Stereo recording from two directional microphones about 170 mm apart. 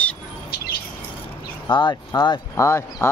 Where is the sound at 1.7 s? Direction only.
25° left (ahead or behind).